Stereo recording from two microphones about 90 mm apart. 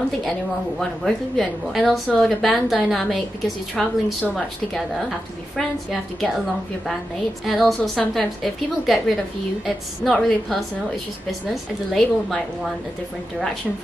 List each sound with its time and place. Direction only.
0.7 s a woman's voice: 5° left (ahead or behind)
3.7 s a woman's voice: 15° left (ahead or behind)
5.6 s a woman's voice: centre (ahead or behind)
11.5 s a woman's voice: 5° left (ahead or behind)